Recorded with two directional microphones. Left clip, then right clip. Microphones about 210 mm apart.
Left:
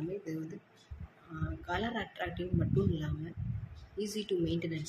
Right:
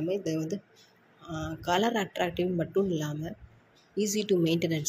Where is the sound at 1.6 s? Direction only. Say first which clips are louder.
Right 9 dB; 35° right (ahead or behind).